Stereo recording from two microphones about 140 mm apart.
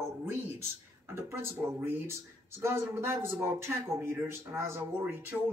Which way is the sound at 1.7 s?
15° right (ahead or behind).